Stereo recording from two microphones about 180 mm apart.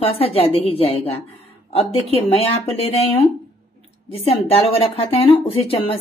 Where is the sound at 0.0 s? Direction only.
30° left (ahead or behind).